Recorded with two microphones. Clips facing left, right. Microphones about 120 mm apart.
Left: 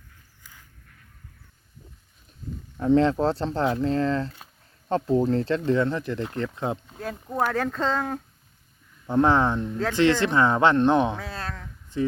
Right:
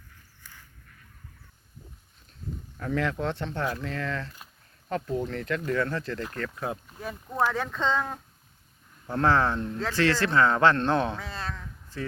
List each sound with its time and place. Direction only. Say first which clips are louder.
2.7 s speech: left 9 dB; 25° left (ahead or behind)
7.3 s speech: left 1 dB; 10° left (ahead or behind)
7.7 s speech: left 2 dB; 40° left (ahead or behind)
9.0 s speech: left 3 dB; 20° left (ahead or behind)